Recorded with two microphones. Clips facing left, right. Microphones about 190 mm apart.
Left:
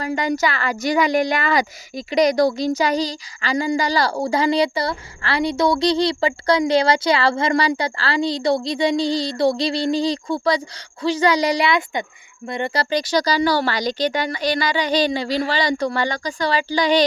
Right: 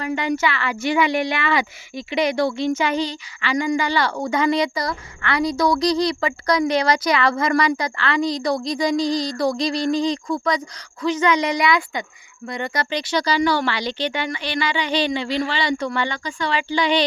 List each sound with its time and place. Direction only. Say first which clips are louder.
0.0 s speech: left 1 dB; 40° left (ahead or behind)